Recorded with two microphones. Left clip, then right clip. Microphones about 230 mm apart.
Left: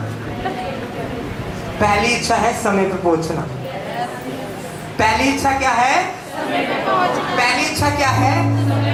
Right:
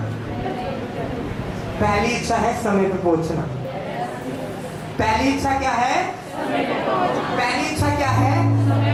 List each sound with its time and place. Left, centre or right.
1.8 s a woman's voice: centre
4.9 s a woman's voice: centre
6.4 s chatter: centre
7.9 s a woman's voice: centre